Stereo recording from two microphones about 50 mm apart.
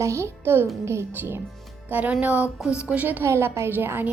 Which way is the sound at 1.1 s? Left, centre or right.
Right.